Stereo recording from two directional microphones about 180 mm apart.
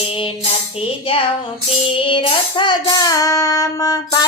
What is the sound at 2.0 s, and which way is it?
Child singing, 30° left (ahead or behind).